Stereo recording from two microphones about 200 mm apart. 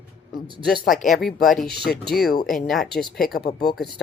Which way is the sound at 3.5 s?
50° left (ahead or behind).